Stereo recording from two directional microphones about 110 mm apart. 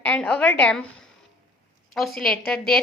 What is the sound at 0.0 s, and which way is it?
Speech, 10° left (ahead or behind).